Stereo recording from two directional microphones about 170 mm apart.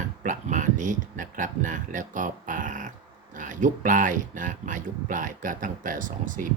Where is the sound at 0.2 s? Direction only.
50° right (ahead or behind).